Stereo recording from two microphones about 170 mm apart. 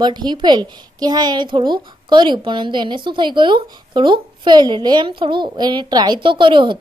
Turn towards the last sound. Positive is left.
turn(degrees=-30)  # may be behind; listen again after turning